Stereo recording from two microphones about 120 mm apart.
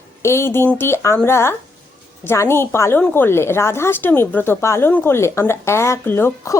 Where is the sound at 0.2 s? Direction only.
20° left (ahead or behind).